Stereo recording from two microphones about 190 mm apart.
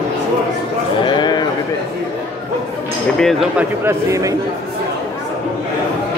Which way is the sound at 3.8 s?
15° right (ahead or behind).